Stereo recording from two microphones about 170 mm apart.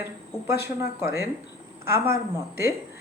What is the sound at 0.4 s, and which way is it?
Speech, 15° right (ahead or behind).